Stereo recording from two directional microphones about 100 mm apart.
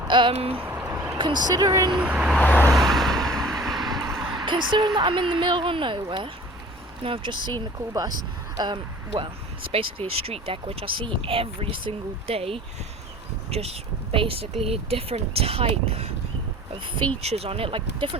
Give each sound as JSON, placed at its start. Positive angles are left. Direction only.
{"t": 0.1, "sound": "speech", "side_deg": -55}
{"t": 0.6, "sound": "a sound", "side_deg": -20}
{"t": 0.9, "sound": "vehicle", "side_deg": -15}
{"t": 1.2, "sound": "speech", "side_deg": -45}
{"t": 1.9, "sound": "speech", "side_deg": -10}
{"t": 2.4, "sound": "vehicle", "side_deg": 15}
{"t": 2.7, "sound": "a sound", "side_deg": 0}
{"t": 4.4, "sound": "speech", "side_deg": -50}
{"t": 7.9, "sound": "speech", "side_deg": -40}
{"t": 9.7, "sound": "speech", "side_deg": -75}
{"t": 13.5, "sound": "speech", "side_deg": -90}
{"t": 17.2, "sound": "speech", "side_deg": -85}